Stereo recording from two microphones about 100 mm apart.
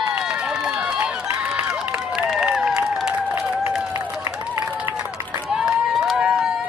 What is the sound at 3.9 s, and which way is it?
Applause, 30° right (ahead or behind).